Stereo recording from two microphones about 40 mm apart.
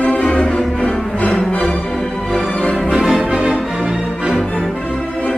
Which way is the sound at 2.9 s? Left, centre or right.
Centre.